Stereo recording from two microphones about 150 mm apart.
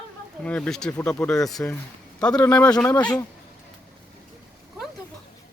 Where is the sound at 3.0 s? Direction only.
25° left (ahead or behind).